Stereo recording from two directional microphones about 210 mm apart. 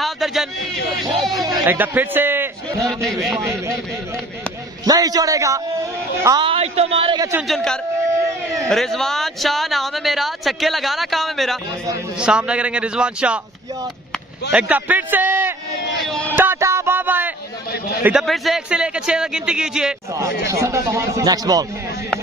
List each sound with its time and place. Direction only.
0.0 s a sound: centre (ahead or behind)
1.5 s a man's voice: 5° right (ahead or behind)
4.8 s a man's voice: 20° right (ahead or behind)
7.4 s speech: centre (ahead or behind)
14.5 s a man's voice: 5° right (ahead or behind)
16.3 s music: 10° right (ahead or behind)
18.0 s speech: centre (ahead or behind)
20.4 s a man's voice: 15° right (ahead or behind)